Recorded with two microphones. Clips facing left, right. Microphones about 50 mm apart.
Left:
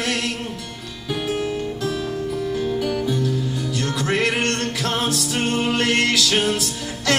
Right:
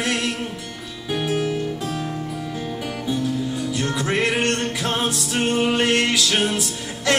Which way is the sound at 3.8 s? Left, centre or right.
Centre.